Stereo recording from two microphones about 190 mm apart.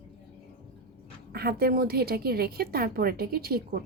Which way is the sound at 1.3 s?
55° right (ahead or behind).